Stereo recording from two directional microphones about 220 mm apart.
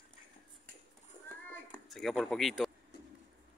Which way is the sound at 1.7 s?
Centre (ahead or behind).